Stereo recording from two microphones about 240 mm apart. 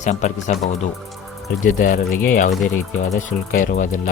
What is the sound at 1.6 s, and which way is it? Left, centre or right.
Speech, left.